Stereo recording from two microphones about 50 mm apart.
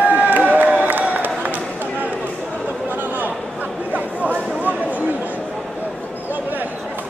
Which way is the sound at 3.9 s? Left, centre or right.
Right.